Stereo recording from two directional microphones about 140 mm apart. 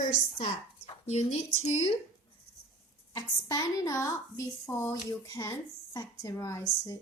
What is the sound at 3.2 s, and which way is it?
Speech, 25° left (ahead or behind).